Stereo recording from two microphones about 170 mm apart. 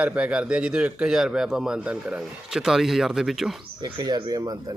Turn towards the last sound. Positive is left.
turn(degrees=-20)  # may be behind; listen again after turning